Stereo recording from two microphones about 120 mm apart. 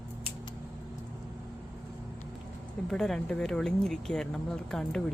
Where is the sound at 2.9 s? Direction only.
5° left (ahead or behind).